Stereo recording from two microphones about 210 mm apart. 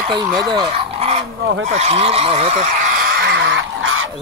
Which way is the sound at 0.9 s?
30° right (ahead or behind).